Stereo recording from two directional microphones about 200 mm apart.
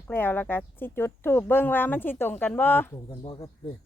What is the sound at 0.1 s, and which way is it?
Speech, 10° left (ahead or behind).